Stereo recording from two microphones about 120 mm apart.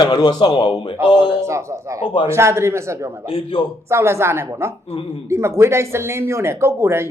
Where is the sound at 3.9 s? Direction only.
20° right (ahead or behind).